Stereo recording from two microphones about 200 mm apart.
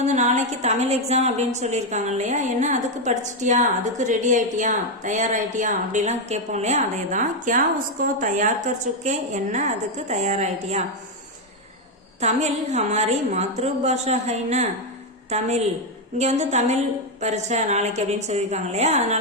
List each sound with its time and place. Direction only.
0.0 s a woman's voice: 35° right (ahead or behind)
12.2 s a woman's voice: 35° right (ahead or behind)